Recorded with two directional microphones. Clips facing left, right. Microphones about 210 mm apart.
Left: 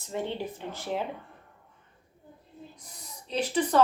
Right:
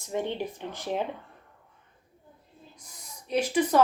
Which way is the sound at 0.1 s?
15° right (ahead or behind).